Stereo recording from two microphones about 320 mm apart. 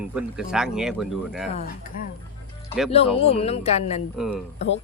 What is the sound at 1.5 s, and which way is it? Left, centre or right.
Speech, left.